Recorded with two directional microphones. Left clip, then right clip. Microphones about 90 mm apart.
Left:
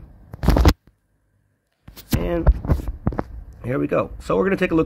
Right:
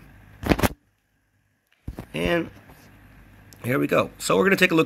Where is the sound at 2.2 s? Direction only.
40° right (ahead or behind).